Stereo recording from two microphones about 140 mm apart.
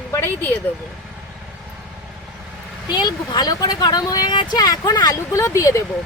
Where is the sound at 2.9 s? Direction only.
30° left (ahead or behind).